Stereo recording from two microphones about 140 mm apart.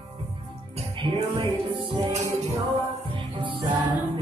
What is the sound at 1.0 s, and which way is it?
Music, 40° right (ahead or behind).